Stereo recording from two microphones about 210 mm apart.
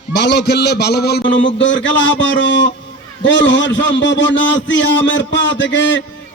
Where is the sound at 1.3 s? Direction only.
60° left (ahead or behind).